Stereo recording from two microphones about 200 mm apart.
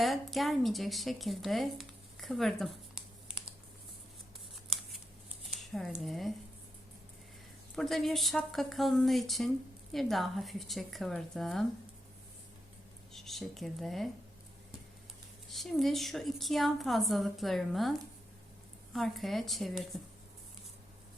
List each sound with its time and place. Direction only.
0.0 s speech: centre (ahead or behind)
5.5 s a sound: centre (ahead or behind)
6.1 s speech: centre (ahead or behind)
7.8 s speech: centre (ahead or behind)
13.1 s speech: centre (ahead or behind)
15.4 s speech: centre (ahead or behind)
18.9 s speech: centre (ahead or behind)